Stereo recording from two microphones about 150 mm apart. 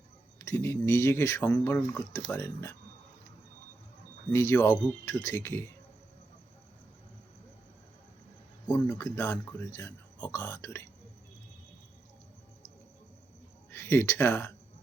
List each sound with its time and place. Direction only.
0.3 s speech: 15° left (ahead or behind)
4.3 s speech: 15° left (ahead or behind)
8.6 s speech: 10° left (ahead or behind)
13.7 s speech: 15° left (ahead or behind)